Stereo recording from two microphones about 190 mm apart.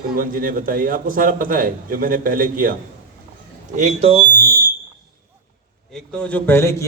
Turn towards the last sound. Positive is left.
turn(degrees=10)  # may be behind; listen again after turning